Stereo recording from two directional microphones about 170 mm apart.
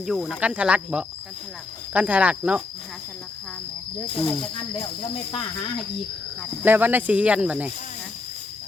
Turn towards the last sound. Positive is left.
turn(degrees=-10)  # may be behind; listen again after turning